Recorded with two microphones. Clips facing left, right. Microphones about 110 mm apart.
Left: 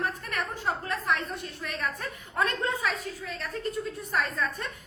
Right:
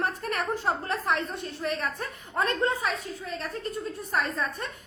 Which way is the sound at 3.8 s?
30° right (ahead or behind).